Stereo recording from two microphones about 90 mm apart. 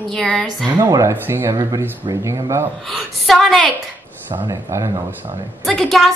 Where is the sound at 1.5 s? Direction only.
50° right (ahead or behind).